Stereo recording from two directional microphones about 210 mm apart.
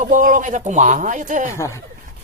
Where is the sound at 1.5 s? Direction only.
15° left (ahead or behind).